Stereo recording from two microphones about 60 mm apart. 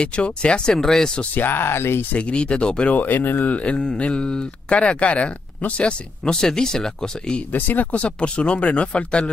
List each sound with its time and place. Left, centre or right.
0.0 s speech: centre
1.3 s speech: left
2.1 s speech: centre
3.0 s speech: left; by 7.4 s centre
7.5 s speech: left